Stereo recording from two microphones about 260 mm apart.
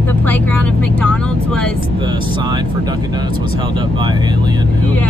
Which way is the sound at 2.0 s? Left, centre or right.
Centre.